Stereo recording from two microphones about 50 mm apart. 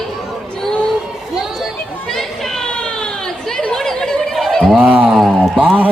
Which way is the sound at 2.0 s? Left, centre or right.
Centre.